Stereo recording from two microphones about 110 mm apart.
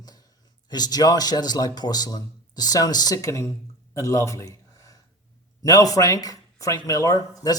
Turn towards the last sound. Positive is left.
turn(degrees=30)  # may be behind; listen again after turning